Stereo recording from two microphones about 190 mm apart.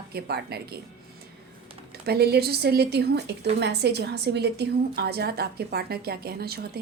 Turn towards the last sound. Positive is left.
turn(degrees=-55)  # may be behind; listen again after turning